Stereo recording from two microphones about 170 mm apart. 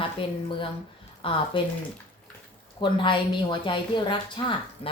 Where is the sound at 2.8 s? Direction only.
30° left (ahead or behind).